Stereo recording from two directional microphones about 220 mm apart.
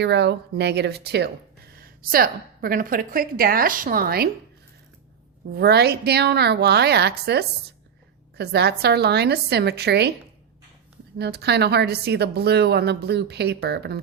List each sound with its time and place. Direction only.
0.0 s a woman's voice: 50° right (ahead or behind)
5.5 s a woman's voice: 45° right (ahead or behind)
11.2 s a woman's voice: 45° right (ahead or behind)